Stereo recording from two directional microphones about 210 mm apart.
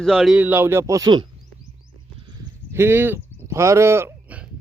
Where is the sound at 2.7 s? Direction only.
10° right (ahead or behind).